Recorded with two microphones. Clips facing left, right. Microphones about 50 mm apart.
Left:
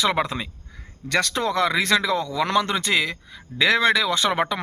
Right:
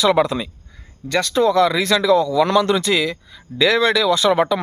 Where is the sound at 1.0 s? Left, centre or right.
Left.